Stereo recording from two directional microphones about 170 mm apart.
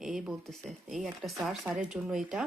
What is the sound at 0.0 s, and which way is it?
Speech, centre (ahead or behind).